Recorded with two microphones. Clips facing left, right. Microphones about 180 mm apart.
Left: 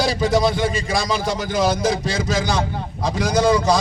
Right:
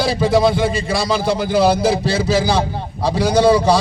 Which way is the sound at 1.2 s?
30° right (ahead or behind).